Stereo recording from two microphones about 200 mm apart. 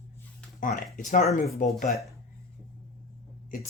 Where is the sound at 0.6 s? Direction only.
40° left (ahead or behind).